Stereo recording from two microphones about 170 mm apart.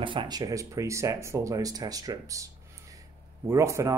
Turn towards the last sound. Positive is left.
turn(degrees=-15)  # may be behind; listen again after turning